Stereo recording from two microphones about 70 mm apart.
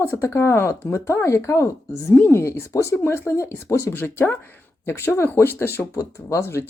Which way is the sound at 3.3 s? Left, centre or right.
Left.